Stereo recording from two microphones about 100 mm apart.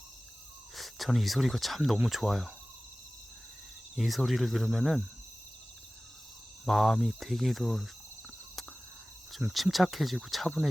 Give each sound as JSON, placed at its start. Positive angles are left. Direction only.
{"t": 0.8, "sound": "speech", "side_deg": 0}
{"t": 3.9, "sound": "speech", "side_deg": 0}
{"t": 6.7, "sound": "speech", "side_deg": 0}
{"t": 9.5, "sound": "speech", "side_deg": 0}